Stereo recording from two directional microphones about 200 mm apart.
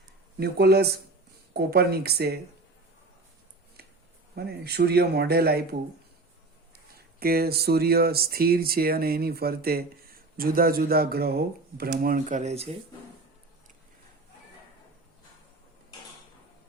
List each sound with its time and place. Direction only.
0.3 s speech: 50° right (ahead or behind)
3.8 s a sound: 50° right (ahead or behind)
4.4 s speech: 55° right (ahead or behind)
6.7 s speech: 50° right (ahead or behind)